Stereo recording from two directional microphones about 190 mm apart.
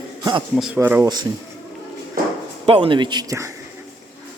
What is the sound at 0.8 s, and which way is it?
Speech, 15° right (ahead or behind).